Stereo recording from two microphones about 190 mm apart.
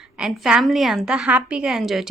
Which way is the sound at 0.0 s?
Centre (ahead or behind).